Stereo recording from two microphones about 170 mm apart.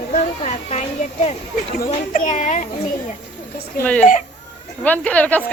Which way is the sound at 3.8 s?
10° left (ahead or behind).